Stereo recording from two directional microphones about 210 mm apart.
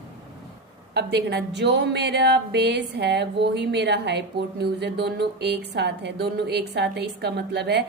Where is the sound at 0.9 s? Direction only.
50° right (ahead or behind).